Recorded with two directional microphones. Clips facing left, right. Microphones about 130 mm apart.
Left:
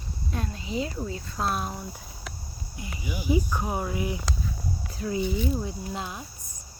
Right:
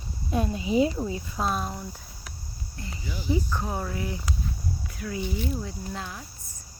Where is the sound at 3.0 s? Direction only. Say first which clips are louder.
Left 2 dB; 15° left (ahead or behind).